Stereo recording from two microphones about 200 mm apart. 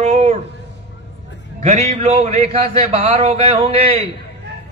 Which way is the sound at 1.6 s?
35° right (ahead or behind).